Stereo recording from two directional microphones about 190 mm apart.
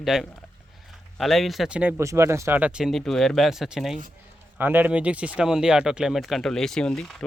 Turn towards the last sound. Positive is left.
turn(degrees=5)  # may be behind; listen again after turning